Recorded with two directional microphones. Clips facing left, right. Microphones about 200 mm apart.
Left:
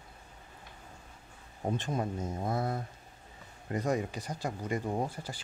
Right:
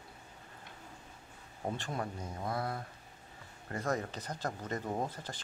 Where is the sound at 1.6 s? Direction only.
20° left (ahead or behind).